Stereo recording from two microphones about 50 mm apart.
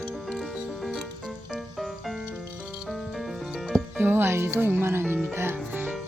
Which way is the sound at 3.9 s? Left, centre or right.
Right.